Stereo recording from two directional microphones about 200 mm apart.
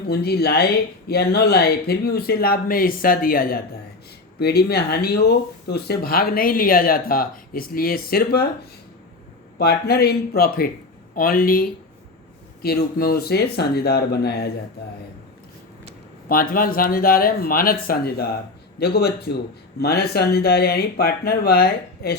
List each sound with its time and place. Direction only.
0.1 s speech: 50° left (ahead or behind)
9.6 s speech: 50° left (ahead or behind)
16.3 s speech: 45° left (ahead or behind)